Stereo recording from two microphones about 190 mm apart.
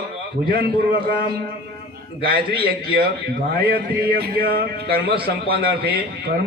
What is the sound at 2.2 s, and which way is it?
A man's voice, 55° right (ahead or behind).